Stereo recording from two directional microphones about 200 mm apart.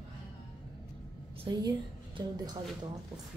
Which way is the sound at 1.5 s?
25° right (ahead or behind).